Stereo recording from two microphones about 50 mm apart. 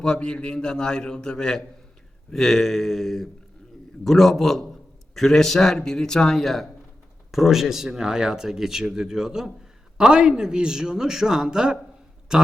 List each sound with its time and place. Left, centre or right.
0.0 s a man's voice: centre
7.3 s speech: centre